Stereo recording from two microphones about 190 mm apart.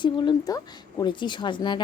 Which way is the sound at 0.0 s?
25° left (ahead or behind).